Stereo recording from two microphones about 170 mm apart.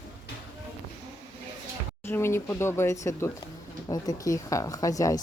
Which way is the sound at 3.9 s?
20° left (ahead or behind).